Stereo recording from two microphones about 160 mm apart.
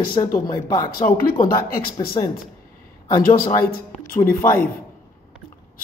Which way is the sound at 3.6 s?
70° left (ahead or behind).